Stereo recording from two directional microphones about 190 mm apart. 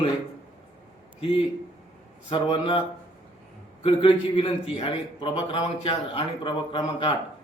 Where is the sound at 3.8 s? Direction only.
30° left (ahead or behind).